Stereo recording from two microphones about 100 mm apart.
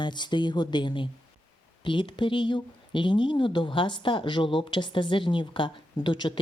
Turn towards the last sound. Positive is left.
turn(degrees=50)  # may be behind; listen again after turning